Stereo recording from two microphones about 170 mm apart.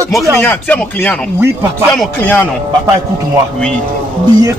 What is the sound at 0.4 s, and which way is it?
Speech, 10° left (ahead or behind).